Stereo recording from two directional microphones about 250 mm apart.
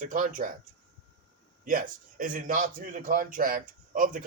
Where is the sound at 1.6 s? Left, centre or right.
Right.